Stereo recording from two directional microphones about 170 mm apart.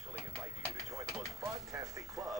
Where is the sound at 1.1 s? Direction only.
Centre (ahead or behind).